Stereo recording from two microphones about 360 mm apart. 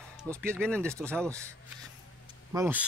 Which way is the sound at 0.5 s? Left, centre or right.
Centre.